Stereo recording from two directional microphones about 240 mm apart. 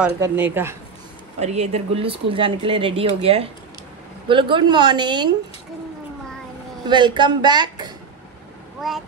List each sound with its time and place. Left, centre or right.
0.2 s speech: centre
1.4 s speech: right
6.9 s speech: centre
8.8 s speech: centre